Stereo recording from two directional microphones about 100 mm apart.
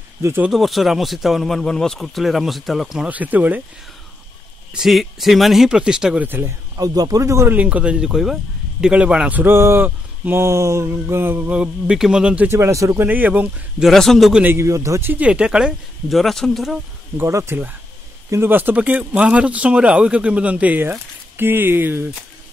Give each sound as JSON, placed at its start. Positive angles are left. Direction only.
{"t": 0.5, "sound": "speech", "side_deg": 0}
{"t": 3.1, "sound": "speech", "side_deg": -15}
{"t": 4.7, "sound": "speech", "side_deg": 0}
{"t": 6.2, "sound": "speech", "side_deg": -20}
{"t": 6.8, "sound": "speech", "side_deg": -40}
{"t": 7.5, "sound": "speech", "side_deg": -15}
{"t": 10.4, "sound": "speech", "side_deg": -30}
{"t": 12.4, "sound": "speech", "side_deg": -30}
{"t": 13.0, "sound": "speech", "side_deg": -15}
{"t": 13.8, "sound": "speech", "side_deg": 5}
{"t": 14.4, "sound": "speech", "side_deg": -25}
{"t": 17.2, "sound": "speech", "side_deg": -25}